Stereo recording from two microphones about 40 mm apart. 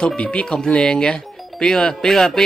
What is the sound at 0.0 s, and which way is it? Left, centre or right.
Speech, left.